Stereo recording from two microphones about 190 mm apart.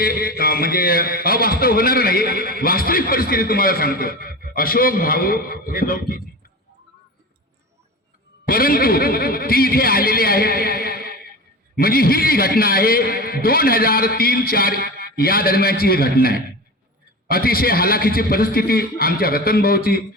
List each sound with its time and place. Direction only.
0.0 s a man's voice: 50° left (ahead or behind)
8.4 s a man's voice: 50° left (ahead or behind)